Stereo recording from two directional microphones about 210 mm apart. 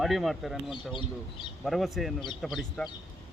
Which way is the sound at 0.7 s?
25° left (ahead or behind).